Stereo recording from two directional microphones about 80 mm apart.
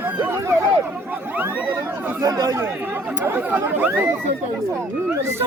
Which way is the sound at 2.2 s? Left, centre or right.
Right.